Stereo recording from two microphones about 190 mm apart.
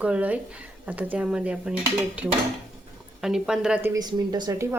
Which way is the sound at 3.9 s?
20° right (ahead or behind).